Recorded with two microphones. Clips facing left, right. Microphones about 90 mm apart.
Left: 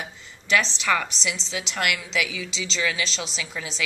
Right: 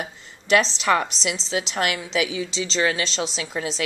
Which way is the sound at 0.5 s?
35° right (ahead or behind).